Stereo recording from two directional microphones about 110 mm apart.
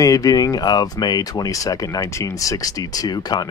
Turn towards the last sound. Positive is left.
turn(degrees=40)  # may be behind; listen again after turning